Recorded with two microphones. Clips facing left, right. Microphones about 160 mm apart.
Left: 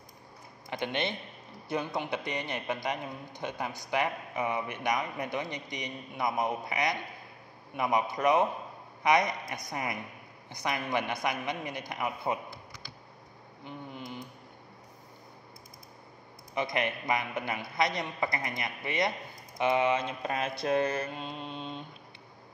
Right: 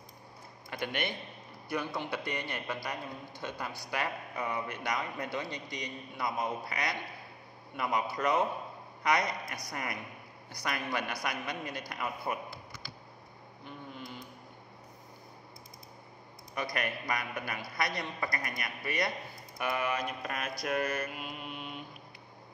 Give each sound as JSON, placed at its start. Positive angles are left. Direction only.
{"t": 0.7, "sound": "a man's voice", "side_deg": 20}
{"t": 13.7, "sound": "a sound", "side_deg": 20}
{"t": 16.5, "sound": "a man's voice", "side_deg": 20}